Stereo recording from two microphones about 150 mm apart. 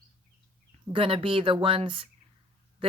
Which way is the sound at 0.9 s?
35° right (ahead or behind).